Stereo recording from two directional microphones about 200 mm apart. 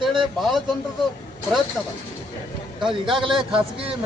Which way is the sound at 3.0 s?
25° right (ahead or behind).